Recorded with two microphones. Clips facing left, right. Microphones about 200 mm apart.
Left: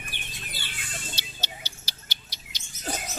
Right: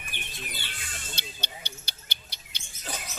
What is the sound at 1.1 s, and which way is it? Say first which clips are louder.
Music: even; 55° right (ahead or behind).